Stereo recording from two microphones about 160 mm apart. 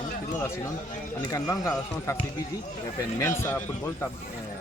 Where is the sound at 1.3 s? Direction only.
20° left (ahead or behind).